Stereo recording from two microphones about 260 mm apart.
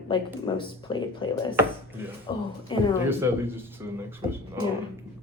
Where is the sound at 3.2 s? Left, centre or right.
Centre.